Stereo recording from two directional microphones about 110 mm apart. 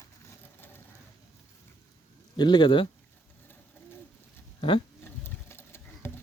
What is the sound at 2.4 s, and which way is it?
Speech, 45° left (ahead or behind).